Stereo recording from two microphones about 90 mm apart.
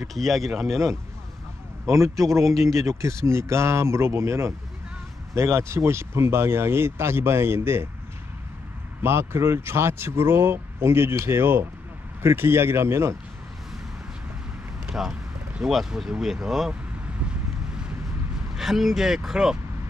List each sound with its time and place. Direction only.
0.0 s speech: centre (ahead or behind)
1.9 s speech: 35° right (ahead or behind)
2.4 s speech: centre (ahead or behind)
2.9 s speech: 35° right (ahead or behind)
9.0 s speech: 30° right (ahead or behind)
14.9 s speech: 5° right (ahead or behind)
18.5 s speech: 5° right (ahead or behind)